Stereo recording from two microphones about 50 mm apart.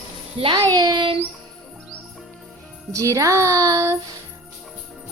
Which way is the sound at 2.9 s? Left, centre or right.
Right.